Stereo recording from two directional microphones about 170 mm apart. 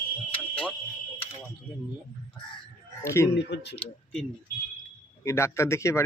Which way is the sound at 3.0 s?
15° left (ahead or behind).